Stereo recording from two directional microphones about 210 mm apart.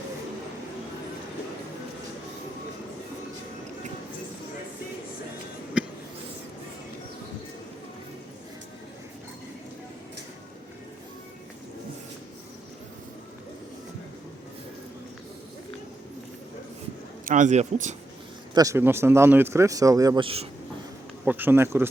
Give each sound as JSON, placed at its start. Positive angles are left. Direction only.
{"t": 5.8, "sound": "a sound", "side_deg": -5}
{"t": 17.2, "sound": "speech", "side_deg": -35}
{"t": 18.5, "sound": "speech", "side_deg": -15}
{"t": 21.2, "sound": "speech", "side_deg": -10}